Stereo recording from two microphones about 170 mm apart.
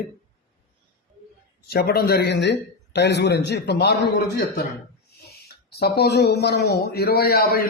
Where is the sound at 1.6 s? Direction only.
65° left (ahead or behind); by 4.1 s 85° left.